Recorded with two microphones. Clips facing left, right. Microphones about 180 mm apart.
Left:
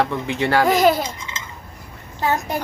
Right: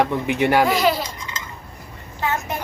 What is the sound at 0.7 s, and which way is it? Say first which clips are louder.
Speech: left 3 dB; 45° left (ahead or behind).